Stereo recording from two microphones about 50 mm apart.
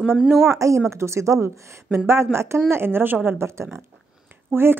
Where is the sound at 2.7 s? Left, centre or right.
Right.